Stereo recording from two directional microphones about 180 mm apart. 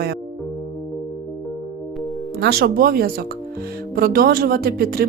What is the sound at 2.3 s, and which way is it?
Speech, 60° right (ahead or behind).